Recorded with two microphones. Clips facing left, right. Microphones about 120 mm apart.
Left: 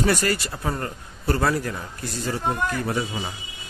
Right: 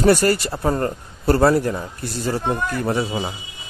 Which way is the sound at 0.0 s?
35° right (ahead or behind).